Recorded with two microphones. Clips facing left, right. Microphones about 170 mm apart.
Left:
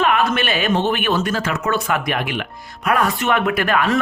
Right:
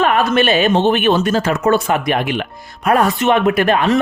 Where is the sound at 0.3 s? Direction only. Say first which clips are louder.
Right 6 dB; 25° right (ahead or behind).